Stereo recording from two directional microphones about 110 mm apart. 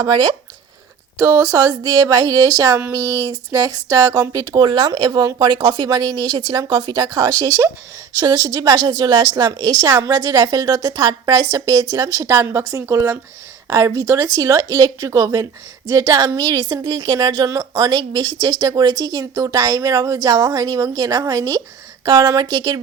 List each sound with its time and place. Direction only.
0.0 s a woman's voice: 40° right (ahead or behind)